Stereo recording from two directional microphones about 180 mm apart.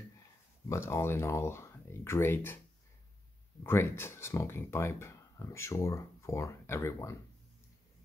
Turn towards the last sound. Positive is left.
turn(degrees=15)  # may be behind; listen again after turning